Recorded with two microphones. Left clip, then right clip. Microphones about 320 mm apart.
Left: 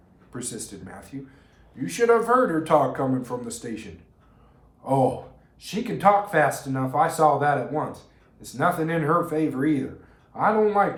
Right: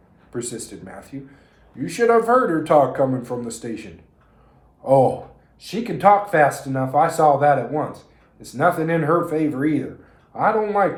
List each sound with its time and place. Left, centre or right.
1.8 s speech: centre
4.8 s speech: centre